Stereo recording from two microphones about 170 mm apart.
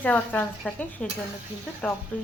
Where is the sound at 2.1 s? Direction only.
10° left (ahead or behind).